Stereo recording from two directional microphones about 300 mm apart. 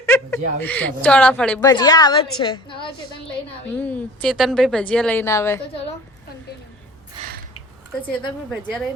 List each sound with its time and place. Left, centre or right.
0.0 s a woman's voice: centre
3.8 s a woman's voice: centre
7.2 s a sound: centre